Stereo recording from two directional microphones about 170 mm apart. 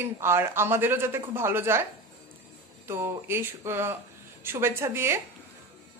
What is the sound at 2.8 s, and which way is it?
Speech, 15° right (ahead or behind).